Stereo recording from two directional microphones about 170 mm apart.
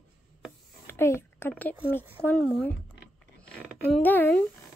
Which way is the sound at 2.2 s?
5° left (ahead or behind).